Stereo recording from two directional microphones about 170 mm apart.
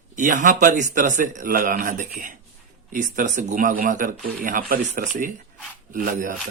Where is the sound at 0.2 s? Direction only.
50° right (ahead or behind).